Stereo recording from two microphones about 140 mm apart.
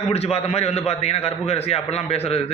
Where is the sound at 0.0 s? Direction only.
50° left (ahead or behind).